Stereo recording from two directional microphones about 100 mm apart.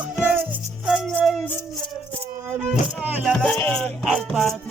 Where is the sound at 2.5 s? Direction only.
15° right (ahead or behind).